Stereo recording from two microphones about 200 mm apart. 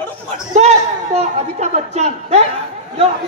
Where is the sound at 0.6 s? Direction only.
35° right (ahead or behind).